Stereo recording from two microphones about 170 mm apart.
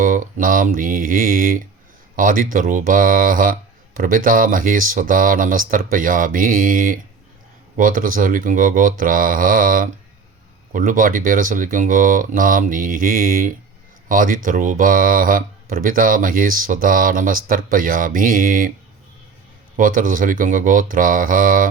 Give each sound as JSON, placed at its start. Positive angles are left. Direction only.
{"t": 0.0, "sound": "speech", "side_deg": -50}
{"t": 19.7, "sound": "speech", "side_deg": -55}